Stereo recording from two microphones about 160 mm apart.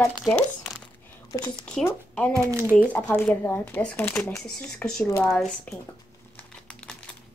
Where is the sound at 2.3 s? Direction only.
20° right (ahead or behind).